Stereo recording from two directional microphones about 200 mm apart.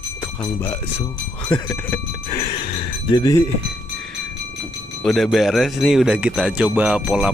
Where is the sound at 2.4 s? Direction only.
25° left (ahead or behind).